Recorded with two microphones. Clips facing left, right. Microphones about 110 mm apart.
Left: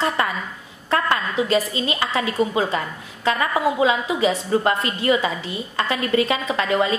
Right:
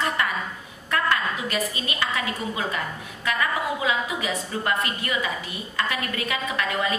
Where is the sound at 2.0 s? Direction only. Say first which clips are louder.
Left 6 dB; 30° left (ahead or behind).